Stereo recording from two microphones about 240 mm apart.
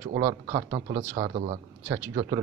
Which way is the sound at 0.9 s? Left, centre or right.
Right.